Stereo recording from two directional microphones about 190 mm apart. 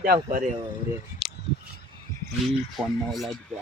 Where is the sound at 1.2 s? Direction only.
Centre (ahead or behind).